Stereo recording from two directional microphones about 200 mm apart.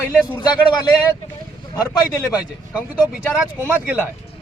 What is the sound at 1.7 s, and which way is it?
Speech, 15° left (ahead or behind).